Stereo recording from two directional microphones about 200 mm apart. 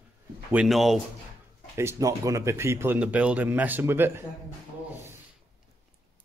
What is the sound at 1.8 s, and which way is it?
Speech, 15° right (ahead or behind).